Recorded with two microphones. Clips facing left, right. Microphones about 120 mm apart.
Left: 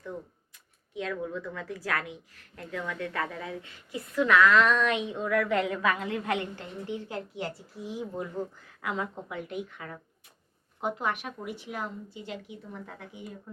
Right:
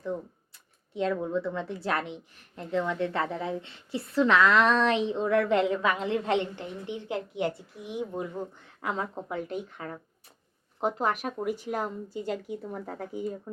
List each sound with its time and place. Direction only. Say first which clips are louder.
0.9 s a woman's voice: right 5 dB; 30° right (ahead or behind)
8.6 s speech: right 1 dB; 30° right (ahead or behind)